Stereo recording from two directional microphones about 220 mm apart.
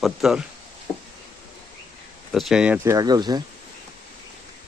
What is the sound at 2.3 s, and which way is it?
A man's voice, centre (ahead or behind).